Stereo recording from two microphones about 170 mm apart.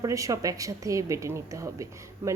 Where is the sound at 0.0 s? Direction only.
20° right (ahead or behind).